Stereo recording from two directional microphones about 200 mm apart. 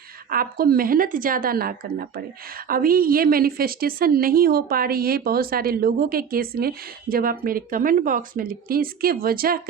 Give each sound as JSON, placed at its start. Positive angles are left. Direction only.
{"t": 0.3, "sound": "a woman's voice", "side_deg": -45}